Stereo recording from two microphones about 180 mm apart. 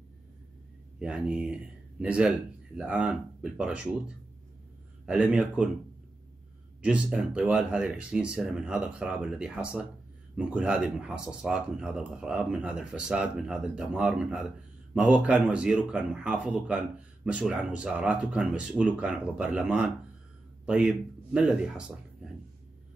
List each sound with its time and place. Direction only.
0.9 s speech: 5° right (ahead or behind)
5.0 s speech: 5° right (ahead or behind)
6.8 s speech: 5° right (ahead or behind)